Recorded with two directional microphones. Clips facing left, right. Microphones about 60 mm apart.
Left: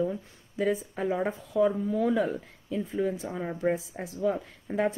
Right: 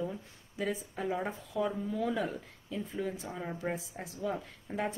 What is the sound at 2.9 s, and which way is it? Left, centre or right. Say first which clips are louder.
Speech: left 8 dB; left.